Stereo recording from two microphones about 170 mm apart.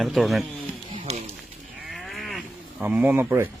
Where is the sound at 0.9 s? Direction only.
40° right (ahead or behind).